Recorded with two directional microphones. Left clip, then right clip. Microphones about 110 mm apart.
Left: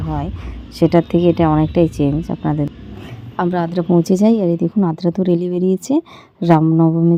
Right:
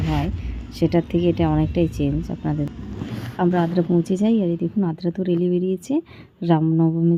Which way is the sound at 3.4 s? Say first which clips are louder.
Left 2 dB; 40° left (ahead or behind).